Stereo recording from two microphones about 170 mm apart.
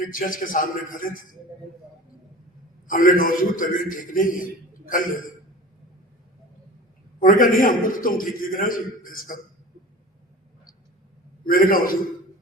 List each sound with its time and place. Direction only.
0.0 s a man's voice: 55° left (ahead or behind)
2.8 s a man's voice: 55° left (ahead or behind)
7.2 s a man's voice: 50° left (ahead or behind)
11.4 s a man's voice: 55° left (ahead or behind)